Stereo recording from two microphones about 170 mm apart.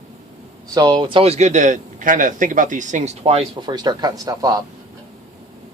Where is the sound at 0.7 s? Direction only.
25° right (ahead or behind).